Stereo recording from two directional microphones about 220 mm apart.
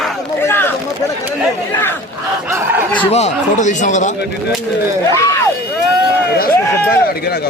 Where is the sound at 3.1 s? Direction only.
30° left (ahead or behind).